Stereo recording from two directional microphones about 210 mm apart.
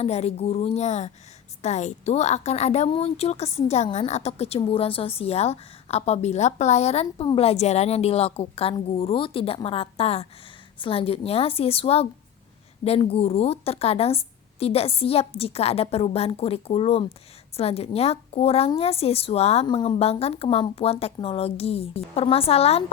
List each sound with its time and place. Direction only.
0.0 s a woman's voice: 30° left (ahead or behind)